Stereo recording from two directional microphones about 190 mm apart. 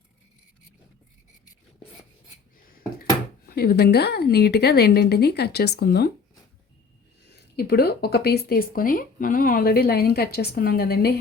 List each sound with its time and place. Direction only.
2.6 s a sound: 50° left (ahead or behind)
3.4 s speech: 55° left (ahead or behind)
7.3 s speech: 55° left (ahead or behind)